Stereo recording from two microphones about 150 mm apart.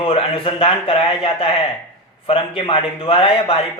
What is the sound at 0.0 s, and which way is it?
A man's voice, 35° left (ahead or behind).